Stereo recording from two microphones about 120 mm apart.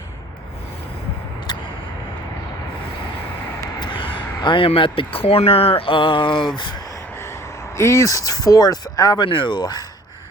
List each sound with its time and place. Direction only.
3.6 s speech: 40° left (ahead or behind)
7.8 s speech: 25° left (ahead or behind)
9.2 s speech: 40° left (ahead or behind)